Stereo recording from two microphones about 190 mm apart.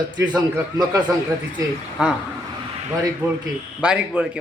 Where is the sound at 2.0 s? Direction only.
5° right (ahead or behind).